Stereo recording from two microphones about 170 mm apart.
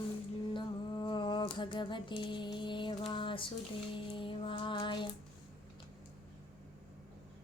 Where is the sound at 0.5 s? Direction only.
25° left (ahead or behind).